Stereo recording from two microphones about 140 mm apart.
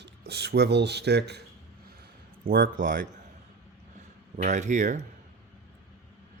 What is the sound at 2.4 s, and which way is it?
Speech, 85° right.